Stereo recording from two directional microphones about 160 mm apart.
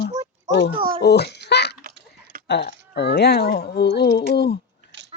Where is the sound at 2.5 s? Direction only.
90° left.